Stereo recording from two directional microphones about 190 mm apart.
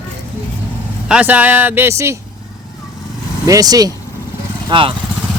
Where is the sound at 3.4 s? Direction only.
20° right (ahead or behind).